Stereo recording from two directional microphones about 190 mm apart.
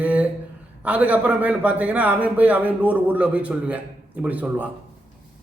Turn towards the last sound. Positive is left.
turn(degrees=-10)  # may be behind; listen again after turning